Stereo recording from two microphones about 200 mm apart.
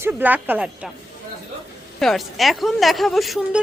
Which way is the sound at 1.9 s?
Centre (ahead or behind).